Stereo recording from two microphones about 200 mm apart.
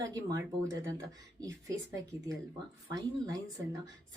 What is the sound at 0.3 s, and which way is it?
Speech, 15° right (ahead or behind).